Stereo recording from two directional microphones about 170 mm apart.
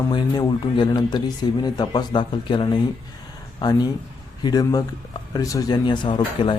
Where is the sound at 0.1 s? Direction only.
25° left (ahead or behind).